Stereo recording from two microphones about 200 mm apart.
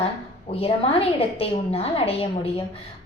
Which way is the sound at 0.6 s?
30° left (ahead or behind).